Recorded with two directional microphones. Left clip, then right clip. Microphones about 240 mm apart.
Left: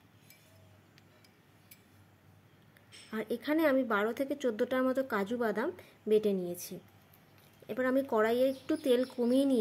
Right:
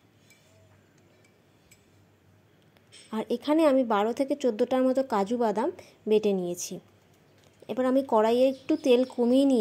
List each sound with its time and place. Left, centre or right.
3.1 s a woman's voice: centre